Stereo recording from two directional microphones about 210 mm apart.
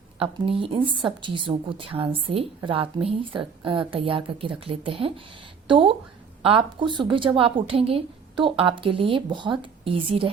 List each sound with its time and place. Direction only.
0.2 s a woman's voice: 25° right (ahead or behind)